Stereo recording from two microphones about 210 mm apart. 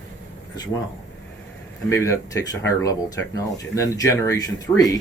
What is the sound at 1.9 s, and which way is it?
Speech, 15° left (ahead or behind).